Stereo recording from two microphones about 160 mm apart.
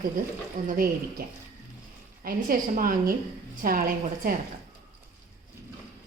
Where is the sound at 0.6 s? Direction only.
55° right (ahead or behind).